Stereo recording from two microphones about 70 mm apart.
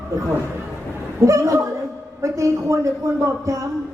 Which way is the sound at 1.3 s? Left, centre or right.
Right.